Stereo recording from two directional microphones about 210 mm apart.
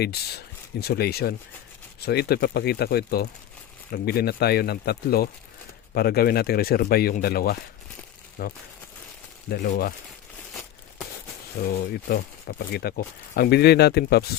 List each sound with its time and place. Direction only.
0.0 s speech: 50° left (ahead or behind)
11.6 s speech: 50° left (ahead or behind)